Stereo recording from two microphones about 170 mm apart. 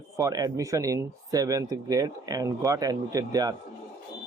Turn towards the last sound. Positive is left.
turn(degrees=-20)  # may be behind; listen again after turning